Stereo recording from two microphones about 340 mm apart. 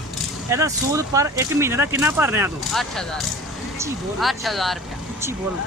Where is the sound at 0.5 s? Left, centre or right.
Centre.